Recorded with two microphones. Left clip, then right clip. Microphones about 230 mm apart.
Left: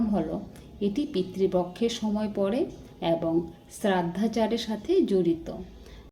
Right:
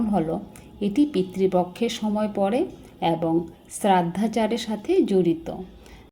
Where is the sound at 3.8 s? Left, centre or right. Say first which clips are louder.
Right 6 dB; centre.